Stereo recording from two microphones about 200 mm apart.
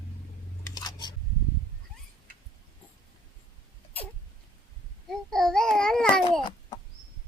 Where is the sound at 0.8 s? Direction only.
20° left (ahead or behind).